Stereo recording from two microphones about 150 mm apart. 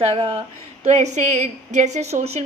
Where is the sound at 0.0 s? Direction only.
35° right (ahead or behind).